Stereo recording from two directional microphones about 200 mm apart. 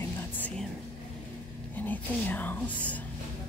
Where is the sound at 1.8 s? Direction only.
10° left (ahead or behind).